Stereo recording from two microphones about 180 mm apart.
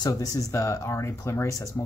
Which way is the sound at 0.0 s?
20° left (ahead or behind).